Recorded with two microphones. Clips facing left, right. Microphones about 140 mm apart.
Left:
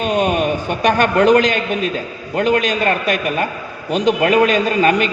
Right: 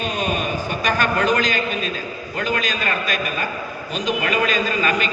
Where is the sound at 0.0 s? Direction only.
70° left (ahead or behind).